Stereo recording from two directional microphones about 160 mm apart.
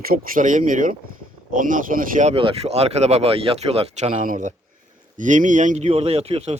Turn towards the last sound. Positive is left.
turn(degrees=-40)  # may be behind; listen again after turning